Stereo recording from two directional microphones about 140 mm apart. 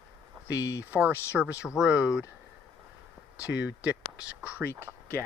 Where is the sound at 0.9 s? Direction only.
10° right (ahead or behind).